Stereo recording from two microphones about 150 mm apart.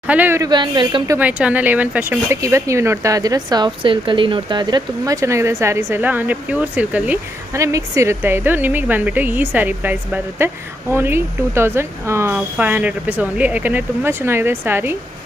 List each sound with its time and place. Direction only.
0.0 s speech: 10° right (ahead or behind)
0.4 s speech: 30° right (ahead or behind)
1.1 s speech: 10° right (ahead or behind)